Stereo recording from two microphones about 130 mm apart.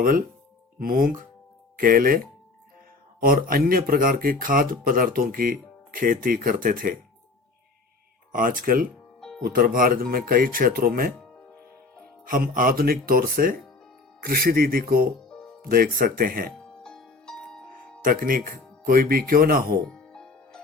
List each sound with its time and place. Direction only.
0.0 s speech: 90° right
8.3 s speech: 90° right
12.2 s speech: 90° right
16.8 s music: 5° left (ahead or behind)
18.0 s speech: 90° right
19.9 s music: 5° left (ahead or behind)